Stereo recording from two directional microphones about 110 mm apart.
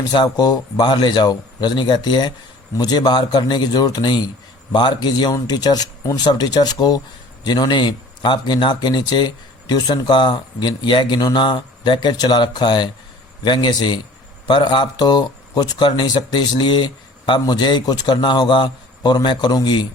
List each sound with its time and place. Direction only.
0.3 s a man's voice: 35° left (ahead or behind)